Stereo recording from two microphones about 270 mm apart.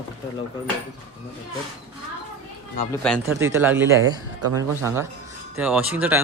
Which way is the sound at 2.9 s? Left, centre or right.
Centre.